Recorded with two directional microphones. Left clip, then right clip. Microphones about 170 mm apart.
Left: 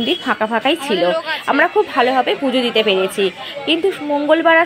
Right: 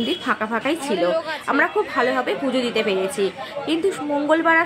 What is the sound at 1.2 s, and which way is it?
A woman's voice, 20° left (ahead or behind).